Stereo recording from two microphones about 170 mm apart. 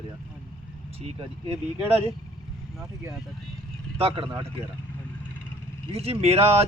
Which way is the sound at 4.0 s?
35° right (ahead or behind).